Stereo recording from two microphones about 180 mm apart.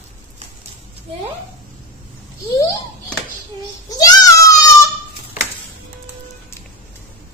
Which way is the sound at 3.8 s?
20° left (ahead or behind).